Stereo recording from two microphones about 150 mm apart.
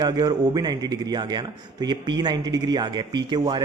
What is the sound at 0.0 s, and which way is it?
A man's voice, 25° right (ahead or behind).